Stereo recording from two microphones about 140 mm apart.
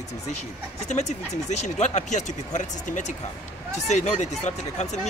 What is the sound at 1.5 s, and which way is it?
Speech, 55° left (ahead or behind).